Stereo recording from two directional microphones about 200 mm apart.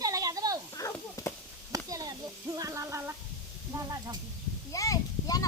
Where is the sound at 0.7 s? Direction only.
15° left (ahead or behind).